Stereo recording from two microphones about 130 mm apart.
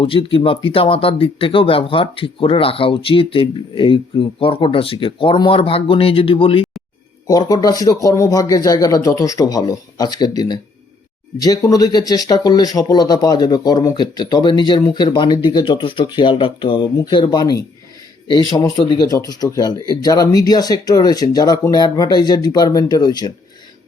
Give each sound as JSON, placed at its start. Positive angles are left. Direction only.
{"t": 0.0, "sound": "speech", "side_deg": 45}
{"t": 7.3, "sound": "speech", "side_deg": 30}
{"t": 18.9, "sound": "speech", "side_deg": 30}